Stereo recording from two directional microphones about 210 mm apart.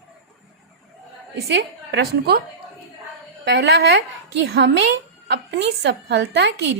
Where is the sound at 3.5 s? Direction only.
55° right (ahead or behind).